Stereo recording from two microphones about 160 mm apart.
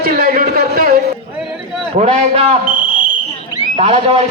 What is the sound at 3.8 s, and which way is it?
Speech, 40° right (ahead or behind).